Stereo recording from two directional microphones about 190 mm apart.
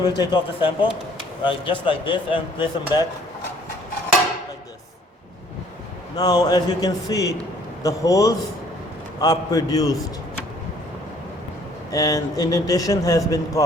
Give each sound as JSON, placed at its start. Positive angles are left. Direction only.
{"t": 0.2, "sound": "speech", "side_deg": 25}
{"t": 6.1, "sound": "a man's voice", "side_deg": 20}
{"t": 11.9, "sound": "a man's voice", "side_deg": 15}